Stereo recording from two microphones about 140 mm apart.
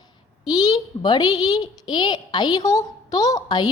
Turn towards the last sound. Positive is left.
turn(degrees=30)  # may be behind; listen again after turning